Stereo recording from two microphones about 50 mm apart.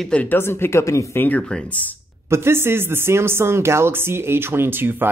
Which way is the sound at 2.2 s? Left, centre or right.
Right.